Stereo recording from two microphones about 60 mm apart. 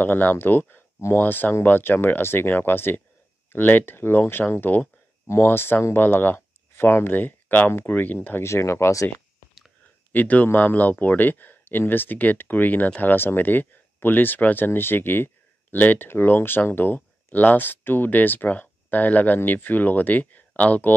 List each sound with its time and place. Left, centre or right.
0.0 s speech: left
8.4 s speech: left
10.1 s speech: left